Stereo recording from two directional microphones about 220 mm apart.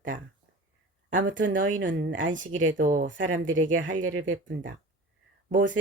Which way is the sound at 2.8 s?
35° right (ahead or behind).